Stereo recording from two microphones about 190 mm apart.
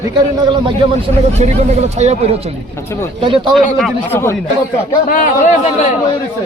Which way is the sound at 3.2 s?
30° right (ahead or behind).